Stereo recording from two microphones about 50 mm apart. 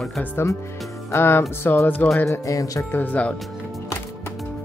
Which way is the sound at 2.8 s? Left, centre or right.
Left.